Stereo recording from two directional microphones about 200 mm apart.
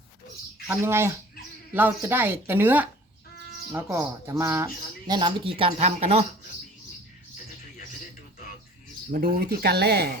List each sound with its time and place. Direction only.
0.7 s speech: 10° right (ahead or behind); by 6.2 s 30° right (ahead or behind)
9.0 s speech: 45° right (ahead or behind)